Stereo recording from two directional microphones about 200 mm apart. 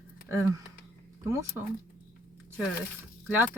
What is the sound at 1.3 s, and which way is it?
Speech, 15° right (ahead or behind).